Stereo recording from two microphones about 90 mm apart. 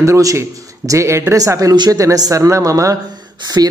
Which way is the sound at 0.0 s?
35° right (ahead or behind).